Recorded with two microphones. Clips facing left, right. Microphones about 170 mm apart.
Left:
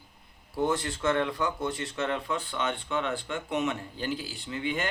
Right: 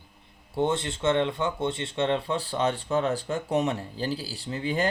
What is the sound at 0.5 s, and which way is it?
Speech, 25° right (ahead or behind).